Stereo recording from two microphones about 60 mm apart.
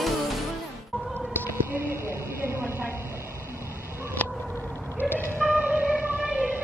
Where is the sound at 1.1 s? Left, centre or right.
Right.